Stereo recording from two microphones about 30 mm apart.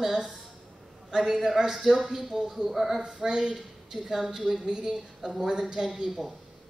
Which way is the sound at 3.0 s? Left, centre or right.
Right.